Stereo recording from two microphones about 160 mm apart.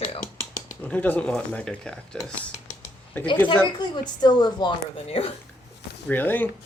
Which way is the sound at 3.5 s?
30° left (ahead or behind).